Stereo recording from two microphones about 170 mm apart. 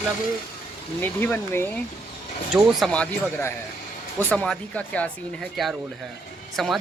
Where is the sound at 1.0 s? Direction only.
10° left (ahead or behind).